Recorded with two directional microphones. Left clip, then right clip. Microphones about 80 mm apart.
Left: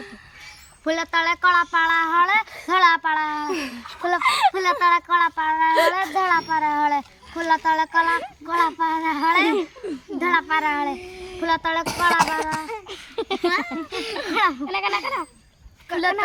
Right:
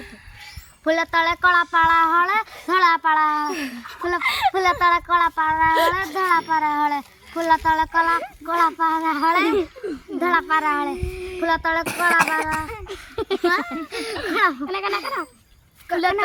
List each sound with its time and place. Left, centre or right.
1.0 s speech: centre
3.5 s speech: left
4.2 s speech: left
4.5 s a child's voice: centre
7.3 s speech: left; by 15.3 s centre
15.9 s speech: centre